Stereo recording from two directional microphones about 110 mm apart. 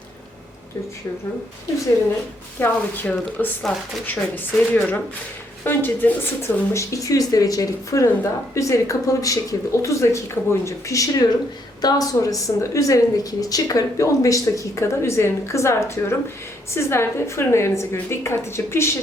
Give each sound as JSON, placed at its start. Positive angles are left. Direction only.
{"t": 2.6, "sound": "speech", "side_deg": 20}
{"t": 6.7, "sound": "a woman's voice", "side_deg": 30}